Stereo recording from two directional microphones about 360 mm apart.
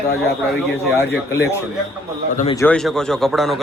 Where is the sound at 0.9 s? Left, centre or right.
Centre.